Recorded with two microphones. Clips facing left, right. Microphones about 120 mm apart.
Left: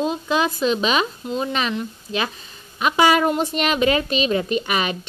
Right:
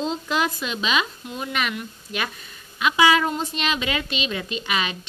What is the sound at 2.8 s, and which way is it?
A woman's voice, 45° left (ahead or behind).